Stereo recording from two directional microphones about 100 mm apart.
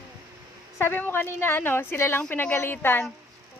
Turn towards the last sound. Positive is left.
turn(degrees=20)  # may be behind; listen again after turning